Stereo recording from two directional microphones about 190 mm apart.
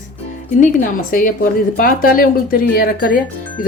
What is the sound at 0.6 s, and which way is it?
Speech, 45° left (ahead or behind).